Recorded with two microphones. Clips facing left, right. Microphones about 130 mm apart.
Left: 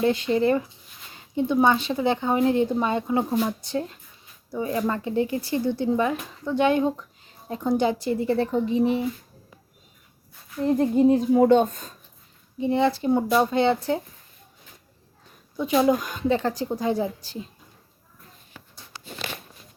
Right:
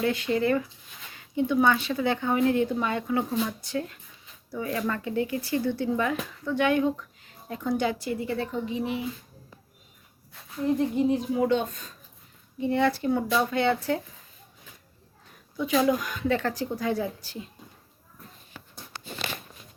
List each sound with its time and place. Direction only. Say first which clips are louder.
0.0 s a woman's voice: left 4 dB; 25° left (ahead or behind)
10.7 s a woman's voice: left 5 dB; 40° left (ahead or behind)
12.5 s speech: left 3 dB; 25° left (ahead or behind)
15.5 s speech: left 3 dB; 25° left (ahead or behind)